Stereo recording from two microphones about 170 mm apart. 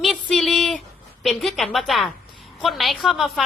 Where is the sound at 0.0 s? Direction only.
Centre (ahead or behind).